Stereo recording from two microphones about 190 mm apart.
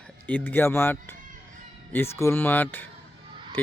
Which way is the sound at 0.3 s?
10° left (ahead or behind).